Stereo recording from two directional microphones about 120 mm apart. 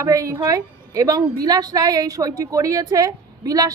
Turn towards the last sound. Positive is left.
turn(degrees=-30)  # may be behind; listen again after turning